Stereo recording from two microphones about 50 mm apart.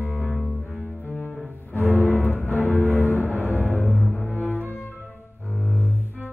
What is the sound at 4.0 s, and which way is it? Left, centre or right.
Cello, left.